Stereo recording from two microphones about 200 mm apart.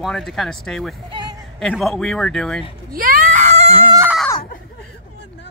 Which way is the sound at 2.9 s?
45° right (ahead or behind).